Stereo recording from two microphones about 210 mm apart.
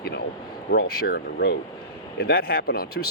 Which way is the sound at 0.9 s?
45° left (ahead or behind).